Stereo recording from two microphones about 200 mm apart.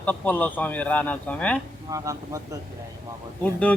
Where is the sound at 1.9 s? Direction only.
15° right (ahead or behind).